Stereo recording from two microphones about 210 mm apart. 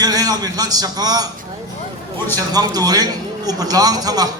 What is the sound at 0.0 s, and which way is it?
A man's voice, 15° right (ahead or behind).